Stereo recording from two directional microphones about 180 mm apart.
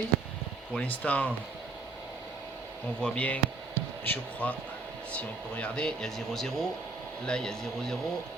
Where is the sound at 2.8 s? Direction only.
5° left (ahead or behind).